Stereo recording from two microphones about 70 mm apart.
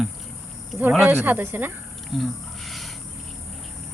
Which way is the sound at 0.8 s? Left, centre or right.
Right.